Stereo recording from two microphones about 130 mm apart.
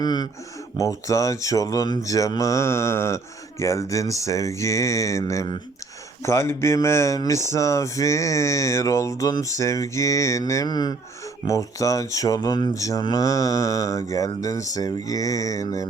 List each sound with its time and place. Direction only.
0.0 s speech: 30° left (ahead or behind)